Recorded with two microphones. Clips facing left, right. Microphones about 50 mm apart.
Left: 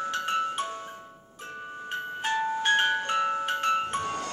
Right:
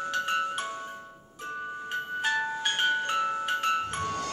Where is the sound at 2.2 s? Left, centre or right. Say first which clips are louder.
Left 2 dB; centre; by 4.2 s left.